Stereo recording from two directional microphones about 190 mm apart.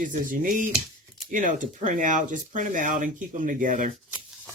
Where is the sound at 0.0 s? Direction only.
45° right (ahead or behind).